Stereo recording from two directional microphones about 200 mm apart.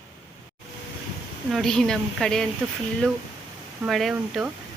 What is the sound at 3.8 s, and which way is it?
Speech, centre (ahead or behind).